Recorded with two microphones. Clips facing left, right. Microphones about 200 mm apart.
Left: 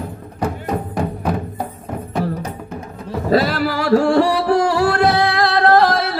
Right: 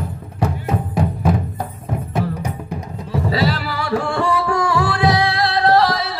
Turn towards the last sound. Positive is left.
turn(degrees=50)  # may be behind; listen again after turning